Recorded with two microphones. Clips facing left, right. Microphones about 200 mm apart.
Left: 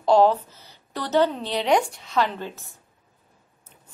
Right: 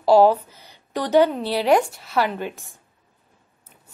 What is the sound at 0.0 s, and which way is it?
A woman's voice, 10° right (ahead or behind).